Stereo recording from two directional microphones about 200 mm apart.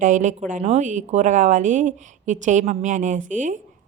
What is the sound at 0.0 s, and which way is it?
Speech, 40° right (ahead or behind).